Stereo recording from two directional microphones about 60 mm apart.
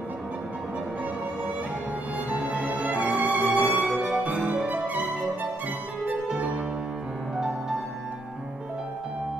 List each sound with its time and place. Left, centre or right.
2.2 s music: right
3.2 s violin: right
3.9 s music: centre
4.2 s music: right